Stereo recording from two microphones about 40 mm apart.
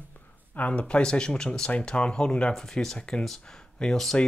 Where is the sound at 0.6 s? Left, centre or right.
Left.